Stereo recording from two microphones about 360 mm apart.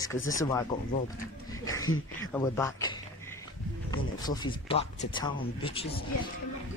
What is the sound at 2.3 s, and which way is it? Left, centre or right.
Speech, centre.